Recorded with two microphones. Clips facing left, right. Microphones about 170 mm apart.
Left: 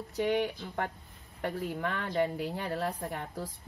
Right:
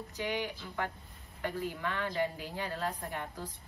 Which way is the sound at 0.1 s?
60° left (ahead or behind).